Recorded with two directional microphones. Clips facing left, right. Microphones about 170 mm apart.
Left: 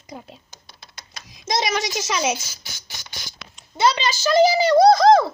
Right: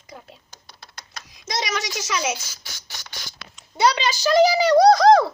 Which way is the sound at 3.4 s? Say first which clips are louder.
Even; 10° right (ahead or behind).